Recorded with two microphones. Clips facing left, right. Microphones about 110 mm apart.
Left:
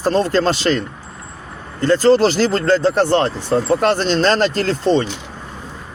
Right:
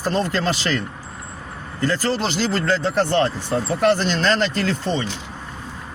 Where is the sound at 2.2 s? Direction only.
45° left (ahead or behind).